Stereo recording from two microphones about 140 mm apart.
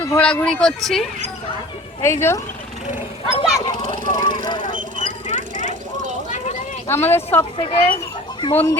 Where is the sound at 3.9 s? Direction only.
75° right (ahead or behind).